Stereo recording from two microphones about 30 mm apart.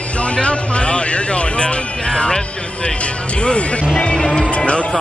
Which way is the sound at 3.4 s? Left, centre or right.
Left.